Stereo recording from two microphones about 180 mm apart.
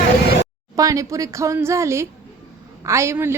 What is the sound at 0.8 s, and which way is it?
A woman's voice, 20° right (ahead or behind).